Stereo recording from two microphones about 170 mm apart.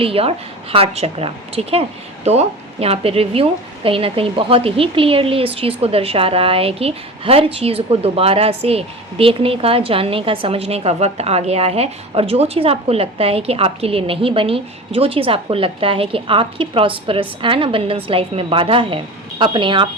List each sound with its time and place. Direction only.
0.0 s a woman's voice: 35° right (ahead or behind)